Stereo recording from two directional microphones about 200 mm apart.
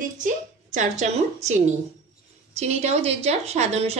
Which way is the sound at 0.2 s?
40° right (ahead or behind).